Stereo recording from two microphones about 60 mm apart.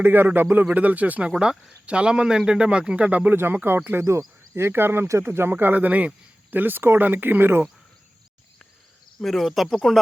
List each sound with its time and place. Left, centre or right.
0.0 s speech: right
1.3 s speech: centre; by 3.8 s right
3.8 s speech: right
9.2 s speech: centre